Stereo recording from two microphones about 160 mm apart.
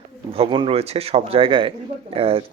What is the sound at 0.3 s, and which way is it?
Speech, 30° right (ahead or behind).